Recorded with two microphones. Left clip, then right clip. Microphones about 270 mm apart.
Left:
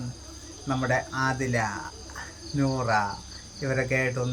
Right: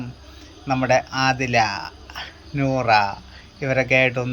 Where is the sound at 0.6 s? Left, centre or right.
Centre.